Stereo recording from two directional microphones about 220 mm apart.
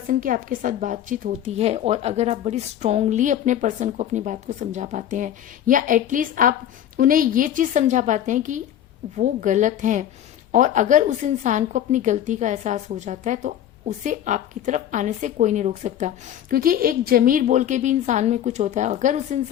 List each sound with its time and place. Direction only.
0.1 s a woman's voice: 40° right (ahead or behind)